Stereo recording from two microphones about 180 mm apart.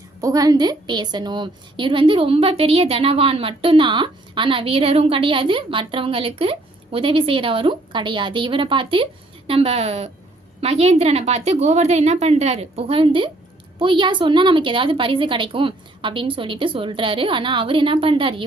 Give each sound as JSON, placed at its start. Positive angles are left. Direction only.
{"t": 0.2, "sound": "a woman's voice", "side_deg": -20}